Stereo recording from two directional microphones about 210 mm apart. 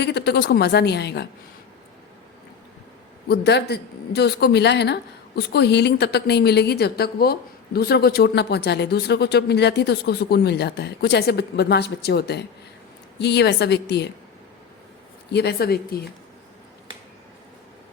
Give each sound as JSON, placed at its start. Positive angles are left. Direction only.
{"t": 0.0, "sound": "a woman's voice", "side_deg": 50}
{"t": 3.2, "sound": "a woman's voice", "side_deg": 50}
{"t": 15.3, "sound": "a woman's voice", "side_deg": 50}